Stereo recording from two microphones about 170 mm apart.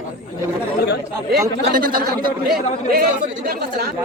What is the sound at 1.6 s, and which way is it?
Speech, 55° right (ahead or behind).